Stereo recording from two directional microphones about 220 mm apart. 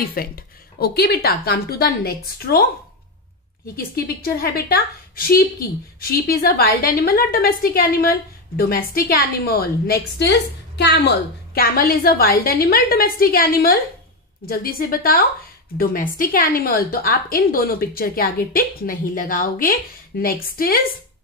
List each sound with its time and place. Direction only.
0.1 s a woman's voice: 45° left (ahead or behind)
3.7 s a woman's voice: 45° left (ahead or behind)